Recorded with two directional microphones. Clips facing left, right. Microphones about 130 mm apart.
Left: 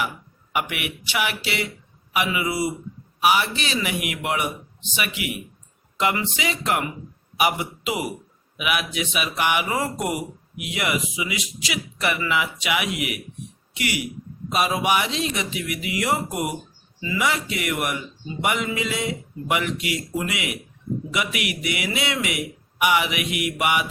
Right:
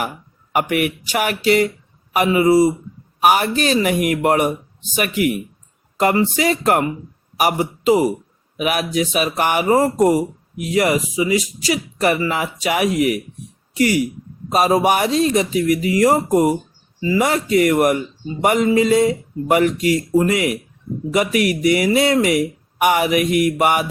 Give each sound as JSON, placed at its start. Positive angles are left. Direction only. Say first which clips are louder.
{"t": 0.5, "sound": "a man's voice", "louder": "right 9 dB", "side_deg": -45}